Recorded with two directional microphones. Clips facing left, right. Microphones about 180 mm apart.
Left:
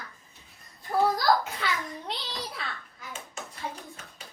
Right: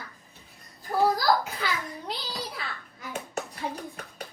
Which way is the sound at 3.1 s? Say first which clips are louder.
Right 7 dB; 65° right (ahead or behind).